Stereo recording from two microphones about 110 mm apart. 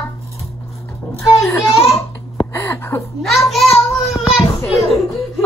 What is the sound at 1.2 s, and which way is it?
Speech, 20° left (ahead or behind).